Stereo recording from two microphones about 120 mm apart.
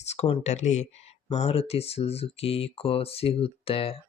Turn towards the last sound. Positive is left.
turn(degrees=50)  # may be behind; listen again after turning